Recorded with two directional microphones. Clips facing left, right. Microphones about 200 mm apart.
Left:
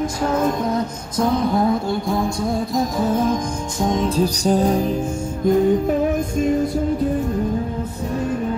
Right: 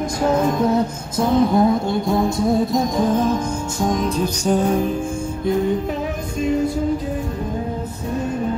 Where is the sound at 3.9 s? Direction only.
30° left (ahead or behind).